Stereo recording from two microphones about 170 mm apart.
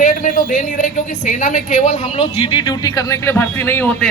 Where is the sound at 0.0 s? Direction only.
50° left (ahead or behind); by 3.9 s 10° left (ahead or behind).